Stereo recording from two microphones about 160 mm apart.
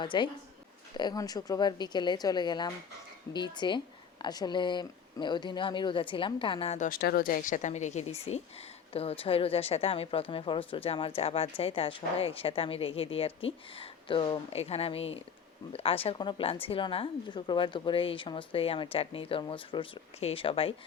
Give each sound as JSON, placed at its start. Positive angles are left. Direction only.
{"t": 0.0, "sound": "speech", "side_deg": 30}
{"t": 6.7, "sound": "speech", "side_deg": 60}